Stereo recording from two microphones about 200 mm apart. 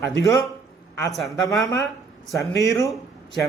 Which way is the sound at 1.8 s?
Centre (ahead or behind).